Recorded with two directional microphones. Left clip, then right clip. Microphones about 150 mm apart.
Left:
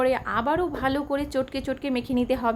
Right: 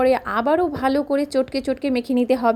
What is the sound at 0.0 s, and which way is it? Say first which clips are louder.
A woman's voice: right 5 dB; 30° right (ahead or behind).